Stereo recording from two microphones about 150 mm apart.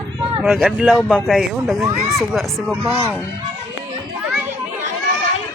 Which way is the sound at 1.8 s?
20° right (ahead or behind).